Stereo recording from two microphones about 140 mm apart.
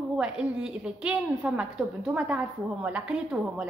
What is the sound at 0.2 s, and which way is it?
A woman's voice, 5° right (ahead or behind).